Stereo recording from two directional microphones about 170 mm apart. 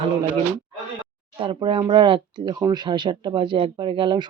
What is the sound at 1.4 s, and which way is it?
Speech, 30° right (ahead or behind).